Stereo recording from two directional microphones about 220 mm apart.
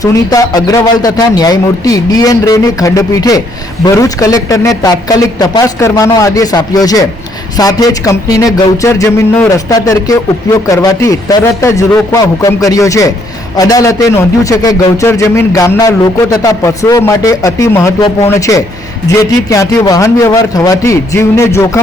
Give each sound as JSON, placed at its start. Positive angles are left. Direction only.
{"t": 0.0, "sound": "a man's voice", "side_deg": 15}